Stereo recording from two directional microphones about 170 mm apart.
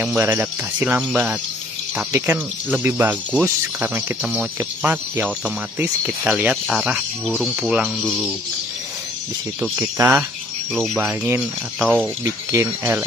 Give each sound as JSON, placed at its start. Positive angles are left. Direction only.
{"t": 0.0, "sound": "speech", "side_deg": -10}
{"t": 9.6, "sound": "speech", "side_deg": -10}
{"t": 12.3, "sound": "speech", "side_deg": -20}